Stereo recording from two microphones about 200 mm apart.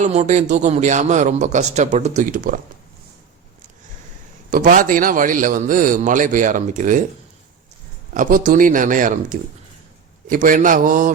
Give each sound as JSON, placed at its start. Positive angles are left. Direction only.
{"t": 0.0, "sound": "speech", "side_deg": -35}
{"t": 4.5, "sound": "speech", "side_deg": -40}
{"t": 8.1, "sound": "speech", "side_deg": -40}